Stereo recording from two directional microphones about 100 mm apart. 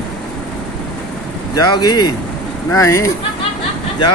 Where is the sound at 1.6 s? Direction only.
45° left (ahead or behind).